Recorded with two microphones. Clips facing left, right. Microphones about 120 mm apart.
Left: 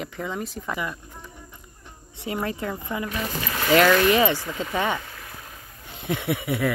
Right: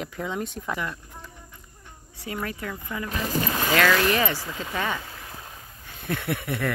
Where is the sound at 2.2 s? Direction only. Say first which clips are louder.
Left 4 dB; 25° left (ahead or behind).